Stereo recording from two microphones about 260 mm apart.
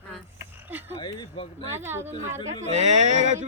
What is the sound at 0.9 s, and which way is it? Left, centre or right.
Speech, centre.